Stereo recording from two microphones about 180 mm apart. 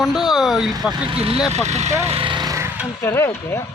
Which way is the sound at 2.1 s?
30° right (ahead or behind).